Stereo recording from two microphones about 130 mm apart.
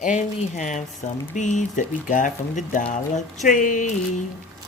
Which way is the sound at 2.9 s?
70° left (ahead or behind).